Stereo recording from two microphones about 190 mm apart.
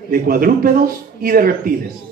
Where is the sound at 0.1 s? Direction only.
50° right (ahead or behind).